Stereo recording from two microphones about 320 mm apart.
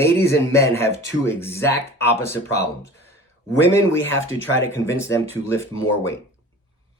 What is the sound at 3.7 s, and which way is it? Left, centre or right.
Speech, centre.